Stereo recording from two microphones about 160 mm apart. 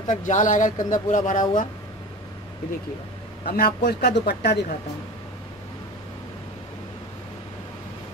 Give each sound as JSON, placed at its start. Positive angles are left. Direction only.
{"t": 0.0, "sound": "speech", "side_deg": 50}
{"t": 3.4, "sound": "speech", "side_deg": 75}